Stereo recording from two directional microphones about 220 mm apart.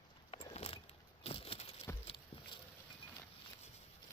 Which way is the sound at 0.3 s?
25° left (ahead or behind).